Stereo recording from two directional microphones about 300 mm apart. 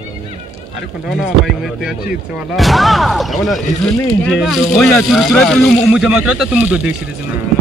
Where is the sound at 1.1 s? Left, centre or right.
Centre.